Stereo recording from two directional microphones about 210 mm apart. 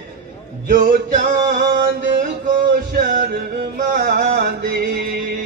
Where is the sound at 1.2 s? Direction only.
45° right (ahead or behind).